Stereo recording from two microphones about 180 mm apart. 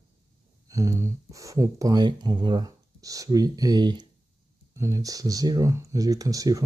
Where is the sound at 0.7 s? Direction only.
20° right (ahead or behind).